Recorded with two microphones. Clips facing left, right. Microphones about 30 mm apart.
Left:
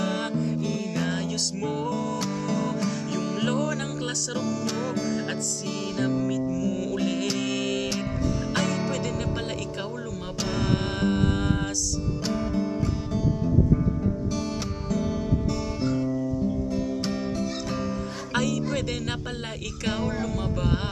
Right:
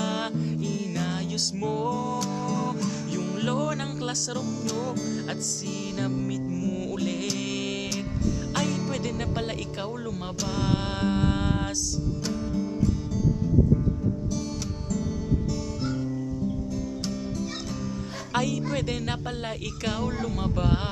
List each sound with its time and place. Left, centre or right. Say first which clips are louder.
0.6 s music: left 2 dB; centre
2.1 s music: left 1 dB; centre
4.4 s music: left 4 dB; centre
5.9 s music: left 4 dB; centre
6.2 s music: left 3 dB; centre
7.0 s music: left 3 dB; centre
7.3 s music: left 3 dB; centre
8.5 s music: left 2 dB; left
11.0 s music: left 2 dB; centre
14.9 s music: left 3 dB; left
18.3 s music: left 1 dB; centre